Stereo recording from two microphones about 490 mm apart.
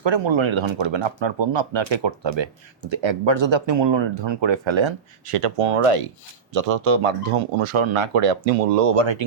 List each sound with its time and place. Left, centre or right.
0.0 s speech: right
9.0 s speech: right